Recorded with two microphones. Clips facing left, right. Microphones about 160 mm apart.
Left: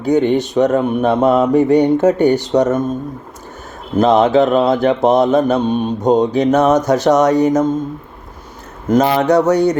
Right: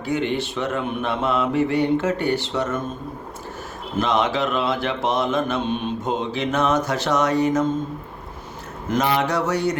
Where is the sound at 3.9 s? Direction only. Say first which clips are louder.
Left 10 dB; 40° left (ahead or behind).